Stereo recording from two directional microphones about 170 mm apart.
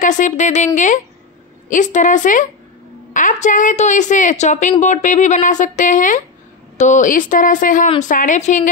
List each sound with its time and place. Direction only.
0.0 s a woman's voice: 50° left (ahead or behind)